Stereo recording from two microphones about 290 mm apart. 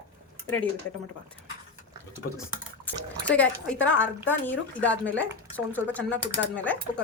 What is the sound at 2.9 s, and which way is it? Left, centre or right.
A woman's voice, centre.